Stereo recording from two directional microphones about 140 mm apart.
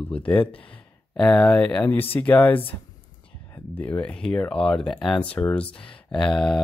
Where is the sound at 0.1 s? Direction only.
10° left (ahead or behind).